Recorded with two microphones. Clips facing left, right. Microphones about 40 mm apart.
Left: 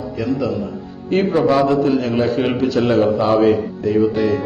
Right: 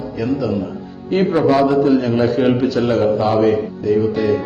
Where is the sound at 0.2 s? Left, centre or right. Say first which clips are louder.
Right 1 dB; centre.